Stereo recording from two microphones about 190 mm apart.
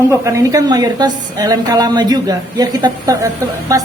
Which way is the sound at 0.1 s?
15° right (ahead or behind).